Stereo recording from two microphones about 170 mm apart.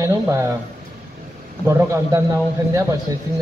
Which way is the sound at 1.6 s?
15° right (ahead or behind).